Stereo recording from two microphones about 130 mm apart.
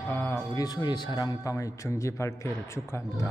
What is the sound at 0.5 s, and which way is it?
A man's voice, 30° left (ahead or behind).